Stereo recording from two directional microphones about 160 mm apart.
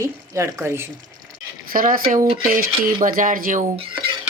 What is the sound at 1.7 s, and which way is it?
Speech, 60° right (ahead or behind).